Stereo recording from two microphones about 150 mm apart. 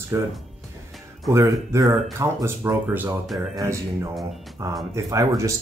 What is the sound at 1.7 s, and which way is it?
Speech, 20° right (ahead or behind).